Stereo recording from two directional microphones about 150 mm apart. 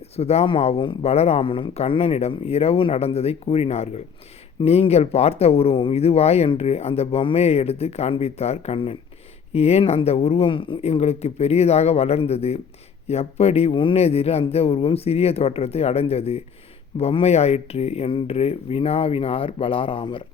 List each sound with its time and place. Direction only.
0.2 s speech: 45° left (ahead or behind)